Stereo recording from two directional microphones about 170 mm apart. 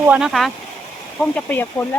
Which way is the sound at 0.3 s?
Centre (ahead or behind).